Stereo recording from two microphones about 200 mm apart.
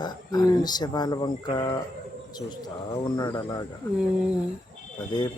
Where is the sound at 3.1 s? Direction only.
20° left (ahead or behind).